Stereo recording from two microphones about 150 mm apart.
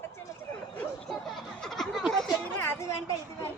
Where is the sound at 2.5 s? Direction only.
15° left (ahead or behind).